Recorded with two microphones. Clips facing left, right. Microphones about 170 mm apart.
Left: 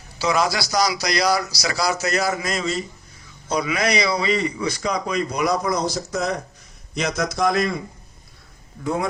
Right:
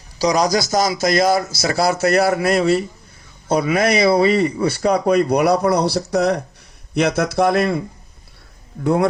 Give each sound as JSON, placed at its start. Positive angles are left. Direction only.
{"t": 0.2, "sound": "a man's voice", "side_deg": -40}
{"t": 8.8, "sound": "speech", "side_deg": -65}